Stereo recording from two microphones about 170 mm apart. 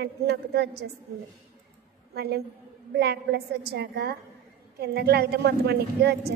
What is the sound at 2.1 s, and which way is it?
A woman's voice, 70° right (ahead or behind).